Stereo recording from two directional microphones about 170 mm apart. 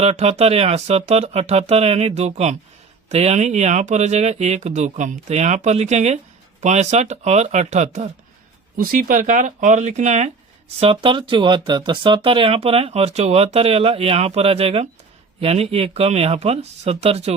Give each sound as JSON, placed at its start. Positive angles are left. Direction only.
{"t": 0.0, "sound": "speech", "side_deg": -40}
{"t": 8.8, "sound": "speech", "side_deg": -55}
{"t": 10.8, "sound": "speech", "side_deg": -30}